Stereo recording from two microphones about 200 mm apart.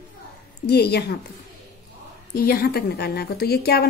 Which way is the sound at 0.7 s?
55° left (ahead or behind).